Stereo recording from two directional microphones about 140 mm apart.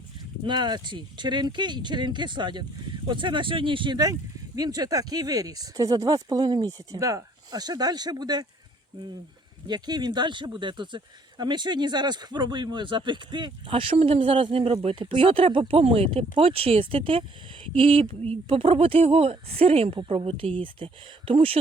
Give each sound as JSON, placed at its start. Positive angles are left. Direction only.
{"t": 0.4, "sound": "speech", "side_deg": -30}
{"t": 9.6, "sound": "speech", "side_deg": -30}